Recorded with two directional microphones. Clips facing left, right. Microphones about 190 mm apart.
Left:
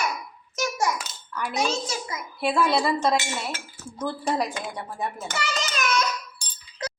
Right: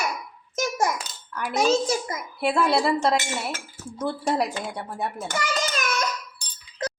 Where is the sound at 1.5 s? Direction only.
50° right (ahead or behind).